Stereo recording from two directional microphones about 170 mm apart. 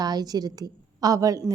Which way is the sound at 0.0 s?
25° right (ahead or behind).